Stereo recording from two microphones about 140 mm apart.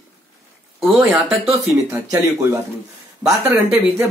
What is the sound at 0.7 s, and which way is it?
Speech, centre (ahead or behind).